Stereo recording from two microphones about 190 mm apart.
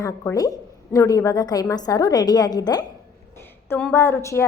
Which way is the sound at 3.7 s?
10° left (ahead or behind).